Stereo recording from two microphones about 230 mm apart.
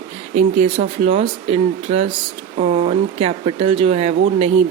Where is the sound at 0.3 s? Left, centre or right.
Right.